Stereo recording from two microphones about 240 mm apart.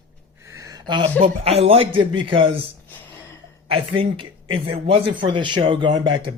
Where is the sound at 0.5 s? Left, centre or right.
Centre.